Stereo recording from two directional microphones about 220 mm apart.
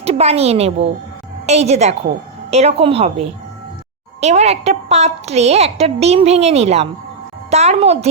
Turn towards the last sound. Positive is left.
turn(degrees=-30)  # may be behind; listen again after turning